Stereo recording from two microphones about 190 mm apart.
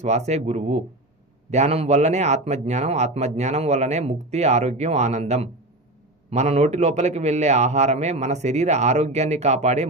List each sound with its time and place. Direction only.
0.0 s a man's voice: 35° right (ahead or behind)